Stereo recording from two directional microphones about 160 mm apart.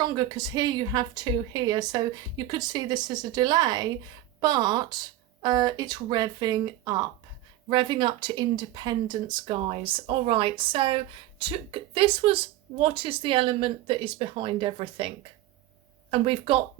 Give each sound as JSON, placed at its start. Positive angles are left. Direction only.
{"t": 0.0, "sound": "a woman's voice", "side_deg": -25}